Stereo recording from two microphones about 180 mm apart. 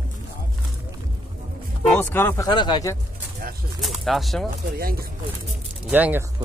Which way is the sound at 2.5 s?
25° left (ahead or behind).